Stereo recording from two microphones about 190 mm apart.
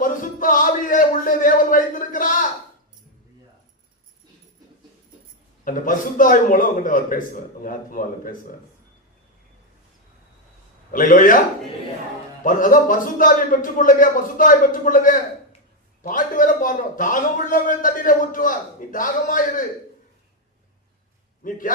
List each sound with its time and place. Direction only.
0.0 s a sound: 45° left (ahead or behind)
5.6 s a man's voice: 45° left (ahead or behind)
10.9 s a man's voice: 45° left (ahead or behind)
12.4 s a man's voice: 45° left (ahead or behind)
21.4 s a man's voice: 45° left (ahead or behind)